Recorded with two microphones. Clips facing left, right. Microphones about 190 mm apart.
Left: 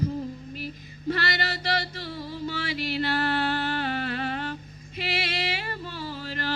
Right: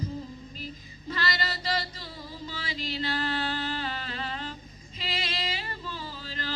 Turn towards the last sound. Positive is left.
turn(degrees=60)  # may be behind; listen again after turning